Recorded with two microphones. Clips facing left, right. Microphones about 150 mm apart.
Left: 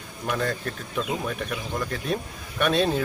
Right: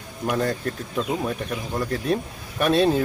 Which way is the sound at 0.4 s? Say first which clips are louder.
Right 3 dB; 35° right (ahead or behind).